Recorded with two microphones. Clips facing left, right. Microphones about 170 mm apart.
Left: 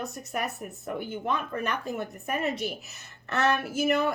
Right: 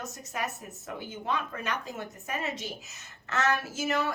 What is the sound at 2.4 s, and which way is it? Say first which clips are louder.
A woman's voice: left 7 dB; 60° left (ahead or behind).